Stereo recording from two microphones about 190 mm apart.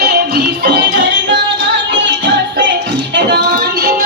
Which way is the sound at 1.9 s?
70° right (ahead or behind).